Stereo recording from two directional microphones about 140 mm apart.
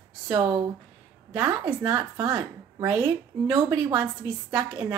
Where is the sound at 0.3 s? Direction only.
25° right (ahead or behind).